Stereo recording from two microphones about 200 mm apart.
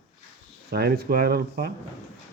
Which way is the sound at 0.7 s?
50° right (ahead or behind).